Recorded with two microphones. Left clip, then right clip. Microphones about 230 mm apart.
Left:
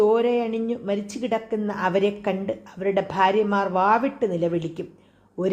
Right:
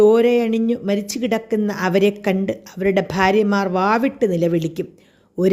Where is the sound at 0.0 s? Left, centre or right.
Right.